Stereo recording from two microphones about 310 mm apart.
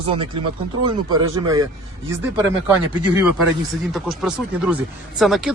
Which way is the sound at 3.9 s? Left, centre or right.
Centre.